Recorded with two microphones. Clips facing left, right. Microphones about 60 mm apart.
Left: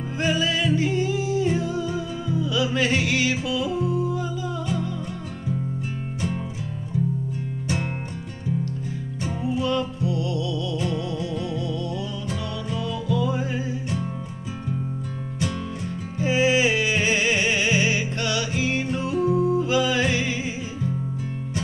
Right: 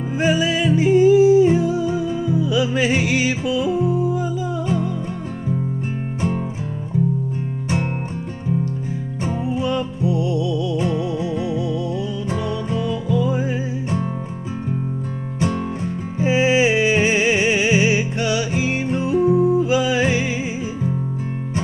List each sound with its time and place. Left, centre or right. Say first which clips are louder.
0.2 s music: right 5 dB; centre
6.9 s music: right 5 dB; right
9.2 s music: right 3 dB; right
13.2 s music: right 4 dB; centre
16.2 s music: right 4 dB; right